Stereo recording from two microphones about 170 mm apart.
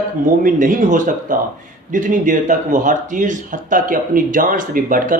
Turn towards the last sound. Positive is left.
turn(degrees=-55)  # may be behind; listen again after turning